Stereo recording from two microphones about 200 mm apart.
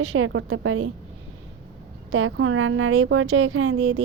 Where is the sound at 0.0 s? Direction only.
85° right.